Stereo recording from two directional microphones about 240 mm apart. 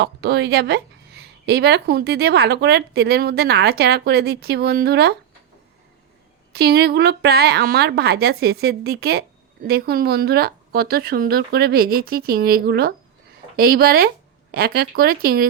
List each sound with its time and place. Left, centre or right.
0.0 s speech: right
6.5 s speech: right